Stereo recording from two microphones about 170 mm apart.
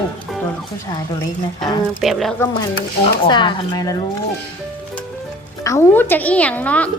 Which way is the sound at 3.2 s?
25° left (ahead or behind).